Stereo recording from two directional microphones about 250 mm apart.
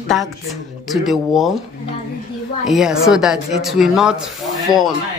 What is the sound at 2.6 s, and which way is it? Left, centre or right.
Speech, centre.